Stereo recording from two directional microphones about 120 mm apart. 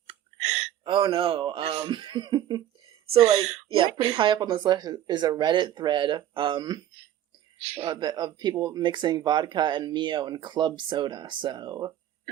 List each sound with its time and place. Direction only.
0.1 s a sound: 60° right (ahead or behind)
0.9 s speech: 40° right (ahead or behind)
3.1 s speech: 55° right (ahead or behind)
3.8 s speech: 45° right (ahead or behind)
7.6 s speech: 55° right (ahead or behind)
7.9 s speech: 40° right (ahead or behind)